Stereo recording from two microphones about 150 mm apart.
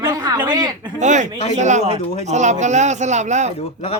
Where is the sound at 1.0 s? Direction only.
55° right (ahead or behind).